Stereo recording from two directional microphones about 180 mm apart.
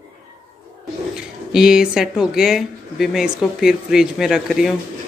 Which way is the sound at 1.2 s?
5° right (ahead or behind).